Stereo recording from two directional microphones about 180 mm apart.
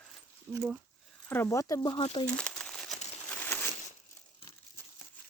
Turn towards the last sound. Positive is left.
turn(degrees=10)  # may be behind; listen again after turning